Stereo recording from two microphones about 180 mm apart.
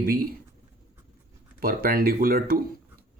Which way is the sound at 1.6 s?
55° right (ahead or behind).